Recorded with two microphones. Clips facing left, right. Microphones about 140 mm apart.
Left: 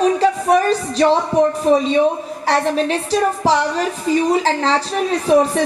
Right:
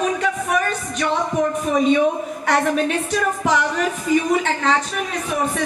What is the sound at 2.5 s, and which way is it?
A woman's voice, 30° left (ahead or behind).